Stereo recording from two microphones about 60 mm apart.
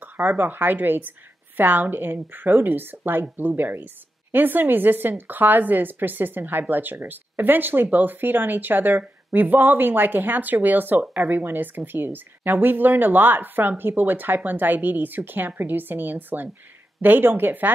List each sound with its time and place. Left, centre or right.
0.0 s speech: right